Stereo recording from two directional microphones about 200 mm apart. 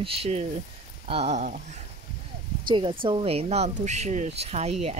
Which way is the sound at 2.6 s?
25° right (ahead or behind).